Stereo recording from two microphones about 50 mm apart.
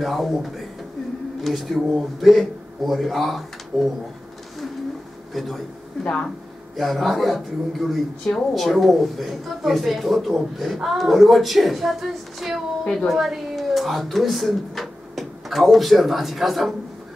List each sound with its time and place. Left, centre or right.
0.0 s speech: centre
5.3 s a man's voice: centre
6.8 s speech: centre
12.8 s a woman's voice: centre
13.1 s speech: centre